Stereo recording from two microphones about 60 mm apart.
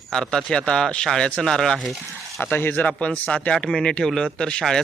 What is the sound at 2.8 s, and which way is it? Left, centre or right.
Speech, left.